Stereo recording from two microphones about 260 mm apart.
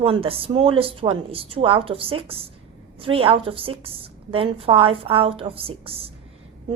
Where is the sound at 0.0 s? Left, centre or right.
Right.